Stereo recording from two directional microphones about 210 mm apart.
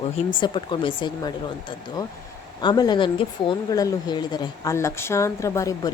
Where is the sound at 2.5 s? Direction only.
20° left (ahead or behind).